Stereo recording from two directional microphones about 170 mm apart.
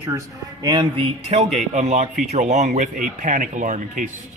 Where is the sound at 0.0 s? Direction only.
20° right (ahead or behind).